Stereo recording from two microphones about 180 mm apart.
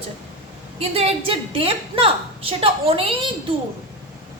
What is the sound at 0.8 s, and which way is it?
A woman's voice, 35° right (ahead or behind).